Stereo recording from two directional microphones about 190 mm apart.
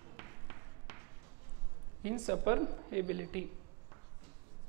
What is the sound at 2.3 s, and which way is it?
Speech, 15° right (ahead or behind).